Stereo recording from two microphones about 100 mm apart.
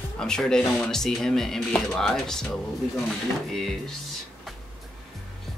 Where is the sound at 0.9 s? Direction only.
5° left (ahead or behind).